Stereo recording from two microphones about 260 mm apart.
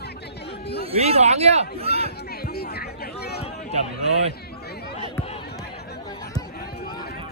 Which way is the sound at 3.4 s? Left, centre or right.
Left.